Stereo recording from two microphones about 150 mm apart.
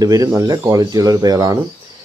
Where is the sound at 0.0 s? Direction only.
25° right (ahead or behind).